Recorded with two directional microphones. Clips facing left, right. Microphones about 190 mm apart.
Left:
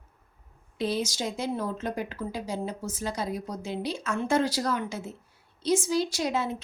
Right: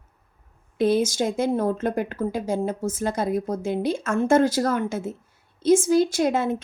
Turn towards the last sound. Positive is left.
turn(degrees=-50)  # may be behind; listen again after turning